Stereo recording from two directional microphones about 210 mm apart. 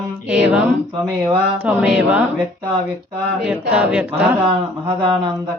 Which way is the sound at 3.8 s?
5° right (ahead or behind).